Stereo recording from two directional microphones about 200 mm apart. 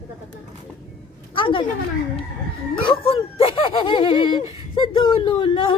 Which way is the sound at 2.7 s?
25° left (ahead or behind).